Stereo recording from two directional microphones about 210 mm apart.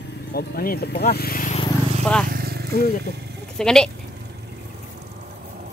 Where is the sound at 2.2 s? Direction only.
45° right (ahead or behind).